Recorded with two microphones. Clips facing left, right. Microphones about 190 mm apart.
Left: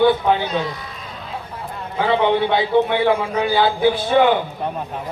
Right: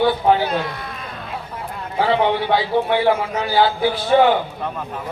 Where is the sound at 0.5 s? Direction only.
60° right (ahead or behind).